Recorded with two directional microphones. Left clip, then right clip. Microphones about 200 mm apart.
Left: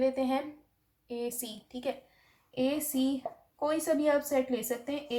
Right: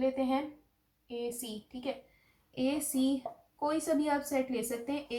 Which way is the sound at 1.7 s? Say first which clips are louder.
Left 4 dB; 40° left (ahead or behind).